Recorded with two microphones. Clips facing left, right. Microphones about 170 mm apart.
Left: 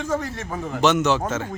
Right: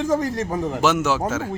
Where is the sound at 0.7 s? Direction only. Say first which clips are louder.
Left 3 dB; 5° right (ahead or behind).